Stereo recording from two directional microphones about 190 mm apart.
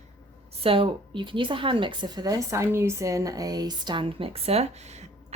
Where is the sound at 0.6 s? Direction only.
30° right (ahead or behind).